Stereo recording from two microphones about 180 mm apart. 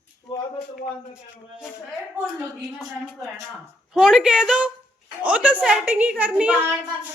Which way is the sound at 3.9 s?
5° right (ahead or behind).